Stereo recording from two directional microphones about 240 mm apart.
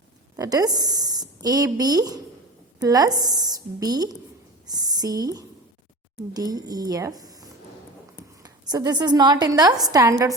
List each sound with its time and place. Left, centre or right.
0.3 s a woman's voice: centre